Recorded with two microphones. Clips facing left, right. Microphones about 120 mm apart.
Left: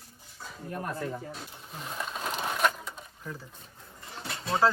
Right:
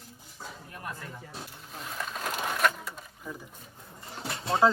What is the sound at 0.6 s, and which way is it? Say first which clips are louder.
Speech: left 9 dB; 45° left (ahead or behind).